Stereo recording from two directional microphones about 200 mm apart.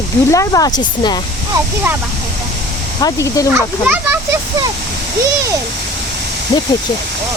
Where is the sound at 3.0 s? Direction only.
15° left (ahead or behind).